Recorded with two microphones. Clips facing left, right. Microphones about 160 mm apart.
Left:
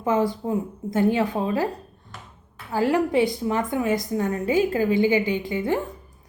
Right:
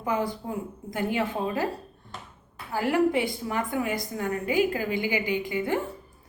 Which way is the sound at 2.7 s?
20° left (ahead or behind).